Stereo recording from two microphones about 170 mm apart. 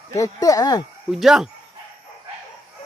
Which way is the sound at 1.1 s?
Centre (ahead or behind).